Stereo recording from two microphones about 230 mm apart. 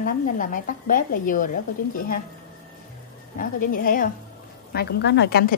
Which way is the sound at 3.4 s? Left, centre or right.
Left.